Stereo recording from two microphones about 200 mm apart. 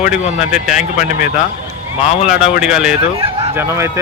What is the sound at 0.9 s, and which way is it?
Speech, 40° left (ahead or behind).